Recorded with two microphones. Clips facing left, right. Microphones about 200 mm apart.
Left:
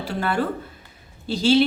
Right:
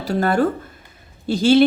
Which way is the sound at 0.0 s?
40° right (ahead or behind).